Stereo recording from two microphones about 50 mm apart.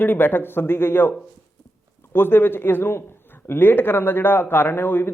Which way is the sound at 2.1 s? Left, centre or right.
Left.